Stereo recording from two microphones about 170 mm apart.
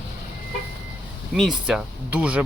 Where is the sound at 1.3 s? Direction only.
Centre (ahead or behind).